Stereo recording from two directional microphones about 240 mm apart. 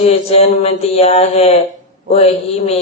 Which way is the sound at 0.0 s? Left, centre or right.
Left.